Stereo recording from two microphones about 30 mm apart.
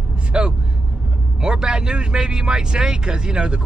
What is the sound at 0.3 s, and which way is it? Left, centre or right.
Vehicle, right.